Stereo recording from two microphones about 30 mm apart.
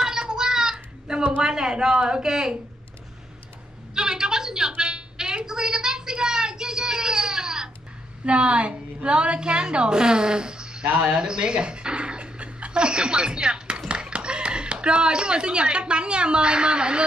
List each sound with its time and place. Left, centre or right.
0.0 s a sound: right
1.4 s speech: right
3.9 s a sound: right
8.3 s a woman's voice: right
11.0 s music: right
12.8 s speech: right